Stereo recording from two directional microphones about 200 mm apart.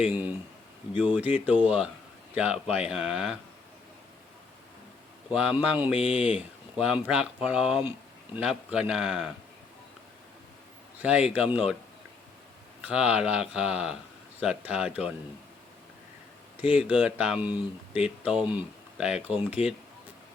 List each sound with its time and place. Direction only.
0.0 s a man's voice: 10° right (ahead or behind)
5.3 s a man's voice: 5° right (ahead or behind)
11.0 s a man's voice: 5° right (ahead or behind)
12.8 s a man's voice: 5° right (ahead or behind)
16.6 s a man's voice: 5° right (ahead or behind)
19.6 s speech: 30° left (ahead or behind)